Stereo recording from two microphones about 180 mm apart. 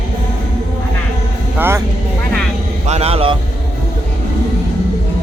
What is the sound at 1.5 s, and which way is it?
Speech, 10° right (ahead or behind).